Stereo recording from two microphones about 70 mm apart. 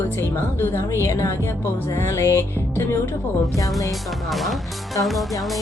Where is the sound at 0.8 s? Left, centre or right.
Left.